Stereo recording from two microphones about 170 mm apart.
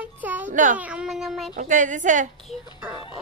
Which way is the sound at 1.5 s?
50° right (ahead or behind).